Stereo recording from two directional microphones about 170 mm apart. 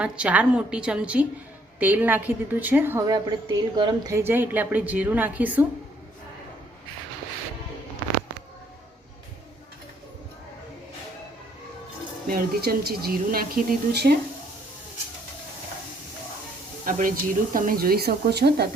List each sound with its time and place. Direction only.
0.0 s a woman's voice: 5° right (ahead or behind)
3.1 s a woman's voice: 25° right (ahead or behind)
12.3 s speech: 60° right (ahead or behind)
16.8 s speech: 55° right (ahead or behind); by 18.7 s 70° right (ahead or behind)